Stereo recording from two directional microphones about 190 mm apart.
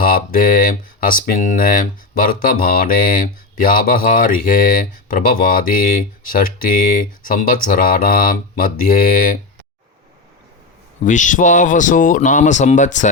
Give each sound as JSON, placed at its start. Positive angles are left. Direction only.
{"t": 0.0, "sound": "speech", "side_deg": 45}
{"t": 11.0, "sound": "speech", "side_deg": 40}